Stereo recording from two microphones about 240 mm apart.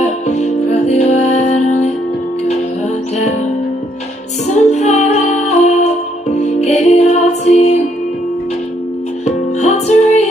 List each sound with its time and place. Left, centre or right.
0.0 s music: left
4.6 s music: left
9.2 s music: left